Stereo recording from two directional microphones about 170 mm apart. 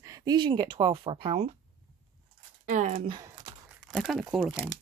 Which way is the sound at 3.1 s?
25° right (ahead or behind).